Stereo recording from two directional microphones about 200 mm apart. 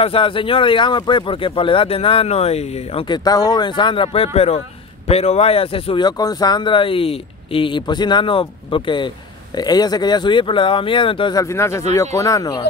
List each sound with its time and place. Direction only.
0.0 s speech: 25° left (ahead or behind)